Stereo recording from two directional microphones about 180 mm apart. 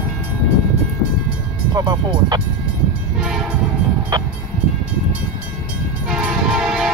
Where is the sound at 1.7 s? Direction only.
25° right (ahead or behind).